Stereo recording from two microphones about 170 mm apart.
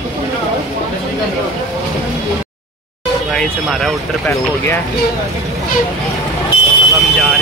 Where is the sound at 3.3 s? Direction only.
5° left (ahead or behind).